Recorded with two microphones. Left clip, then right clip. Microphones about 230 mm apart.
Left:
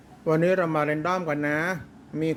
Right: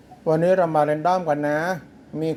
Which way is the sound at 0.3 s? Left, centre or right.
Centre.